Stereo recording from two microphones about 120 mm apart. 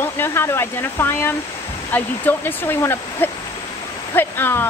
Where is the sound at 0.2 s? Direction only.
20° left (ahead or behind).